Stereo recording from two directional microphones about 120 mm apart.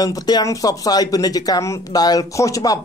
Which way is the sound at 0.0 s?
35° left (ahead or behind).